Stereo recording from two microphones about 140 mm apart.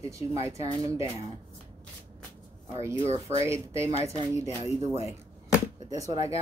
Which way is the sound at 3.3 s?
20° right (ahead or behind).